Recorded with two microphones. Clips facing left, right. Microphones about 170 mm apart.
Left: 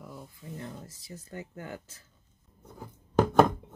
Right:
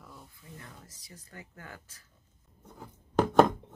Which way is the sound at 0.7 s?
25° left (ahead or behind).